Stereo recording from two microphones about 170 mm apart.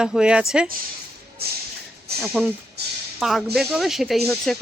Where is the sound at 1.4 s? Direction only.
65° right (ahead or behind).